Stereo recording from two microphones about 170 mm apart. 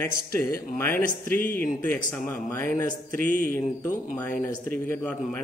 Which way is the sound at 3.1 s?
55° right (ahead or behind).